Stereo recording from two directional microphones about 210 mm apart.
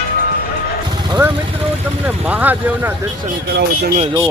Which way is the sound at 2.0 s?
10° right (ahead or behind).